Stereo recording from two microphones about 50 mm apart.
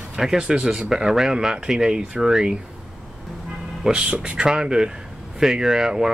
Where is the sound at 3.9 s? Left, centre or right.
Centre.